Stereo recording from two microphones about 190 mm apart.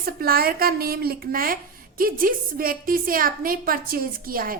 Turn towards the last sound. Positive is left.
turn(degrees=-50)  # may be behind; listen again after turning